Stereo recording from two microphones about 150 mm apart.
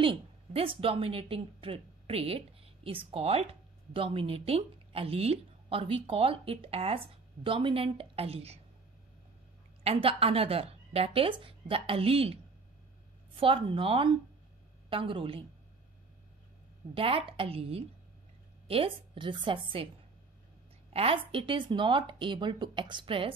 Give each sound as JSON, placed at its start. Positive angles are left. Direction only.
{"t": 0.0, "sound": "a woman's voice", "side_deg": -40}
{"t": 9.8, "sound": "a woman's voice", "side_deg": -40}
{"t": 13.4, "sound": "a woman's voice", "side_deg": -35}
{"t": 16.9, "sound": "a woman's voice", "side_deg": -40}
{"t": 20.9, "sound": "a woman's voice", "side_deg": -40}